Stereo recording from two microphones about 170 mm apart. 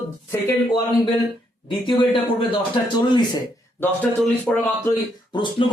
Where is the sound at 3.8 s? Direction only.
10° left (ahead or behind).